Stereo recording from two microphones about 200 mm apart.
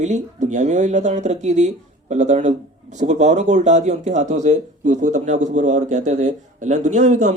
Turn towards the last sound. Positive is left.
turn(degrees=-35)  # may be behind; listen again after turning